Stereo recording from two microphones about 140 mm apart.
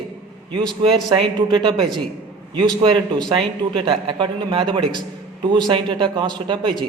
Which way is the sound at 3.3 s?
40° right (ahead or behind).